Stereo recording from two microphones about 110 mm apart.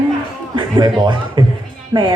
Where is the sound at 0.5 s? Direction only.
45° right (ahead or behind).